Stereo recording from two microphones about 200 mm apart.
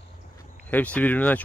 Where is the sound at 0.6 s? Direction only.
5° left (ahead or behind).